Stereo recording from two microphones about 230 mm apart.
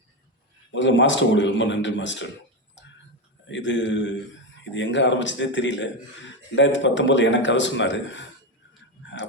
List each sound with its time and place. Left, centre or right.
0.7 s a man's voice: left
3.5 s a man's voice: left